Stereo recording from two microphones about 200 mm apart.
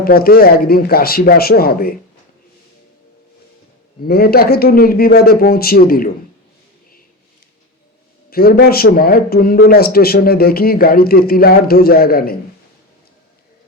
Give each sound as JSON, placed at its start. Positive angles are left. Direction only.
{"t": 0.0, "sound": "a man's voice", "side_deg": 50}
{"t": 4.0, "sound": "a man's voice", "side_deg": 50}
{"t": 8.3, "sound": "a man's voice", "side_deg": 50}